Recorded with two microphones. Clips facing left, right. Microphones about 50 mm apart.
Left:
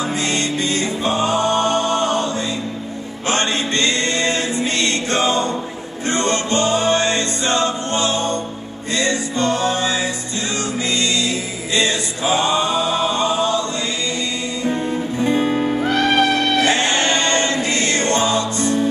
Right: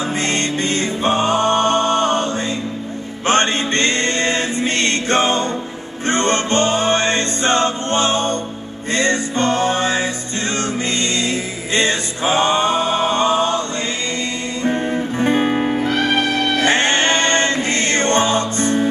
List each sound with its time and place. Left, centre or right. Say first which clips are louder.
0.0 s music: right 1 dB; right
15.9 s music: left 2 dB; centre
16.6 s choir: right 2 dB; right